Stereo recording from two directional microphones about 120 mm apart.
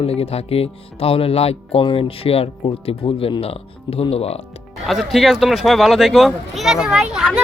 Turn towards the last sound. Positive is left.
turn(degrees=-5)  # may be behind; listen again after turning